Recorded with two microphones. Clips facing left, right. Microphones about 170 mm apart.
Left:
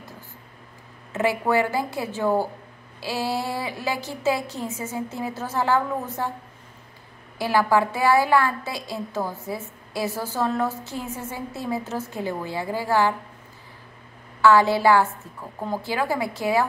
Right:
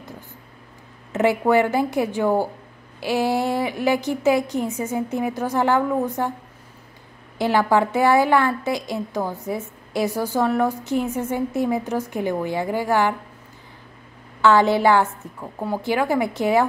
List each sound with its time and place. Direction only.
1.1 s a woman's voice: 20° right (ahead or behind)
7.3 s a woman's voice: 20° right (ahead or behind)
14.4 s a woman's voice: 20° right (ahead or behind)